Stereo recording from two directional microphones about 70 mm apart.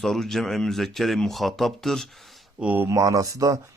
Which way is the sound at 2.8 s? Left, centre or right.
Right.